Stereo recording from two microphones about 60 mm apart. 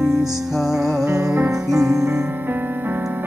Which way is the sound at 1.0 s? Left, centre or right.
Right.